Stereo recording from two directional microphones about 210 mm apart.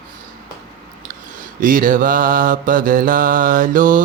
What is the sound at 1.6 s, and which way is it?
Mantra, 40° right (ahead or behind).